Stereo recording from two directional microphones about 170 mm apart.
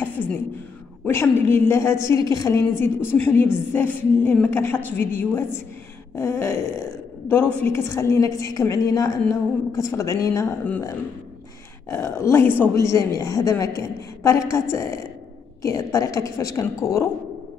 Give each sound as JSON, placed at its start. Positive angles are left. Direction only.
{"t": 1.0, "sound": "a woman's voice", "side_deg": 10}
{"t": 11.9, "sound": "a woman's voice", "side_deg": 15}